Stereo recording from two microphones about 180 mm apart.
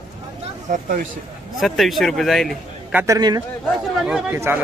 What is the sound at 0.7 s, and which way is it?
Speech, 50° right (ahead or behind).